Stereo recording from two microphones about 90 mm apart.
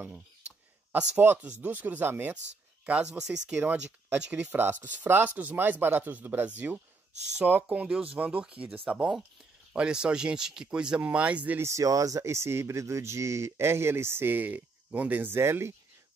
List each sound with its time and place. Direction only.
1.2 s speech: 20° right (ahead or behind)
2.9 s speech: 10° right (ahead or behind)
11.6 s speech: 35° right (ahead or behind)